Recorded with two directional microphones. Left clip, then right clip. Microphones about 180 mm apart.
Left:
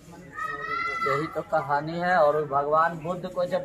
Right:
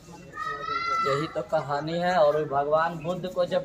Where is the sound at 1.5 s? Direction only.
15° right (ahead or behind).